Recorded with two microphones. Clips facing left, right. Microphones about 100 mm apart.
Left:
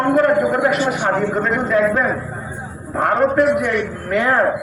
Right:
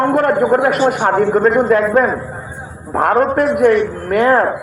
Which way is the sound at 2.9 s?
50° right (ahead or behind).